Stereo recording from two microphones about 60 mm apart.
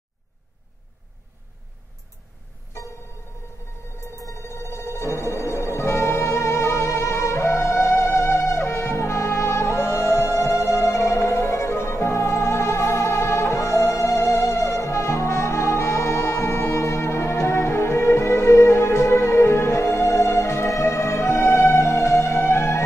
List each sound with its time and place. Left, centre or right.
4.2 s music: left